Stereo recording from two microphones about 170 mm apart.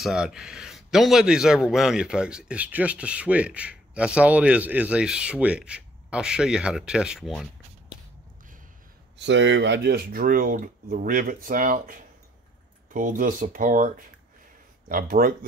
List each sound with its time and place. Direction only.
0.0 s a man's voice: 5° right (ahead or behind)
9.2 s speech: 90° right; by 15.3 s 55° right (ahead or behind)